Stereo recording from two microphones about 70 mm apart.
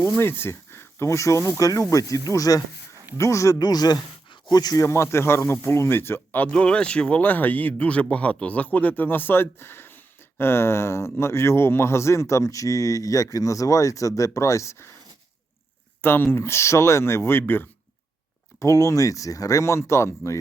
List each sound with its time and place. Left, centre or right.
0.2 s speech: left
3.6 s speech: left
4.8 s a man's voice: left; by 7.2 s centre
7.2 s a man's voice: left
16.0 s a man's voice: left
18.6 s speech: left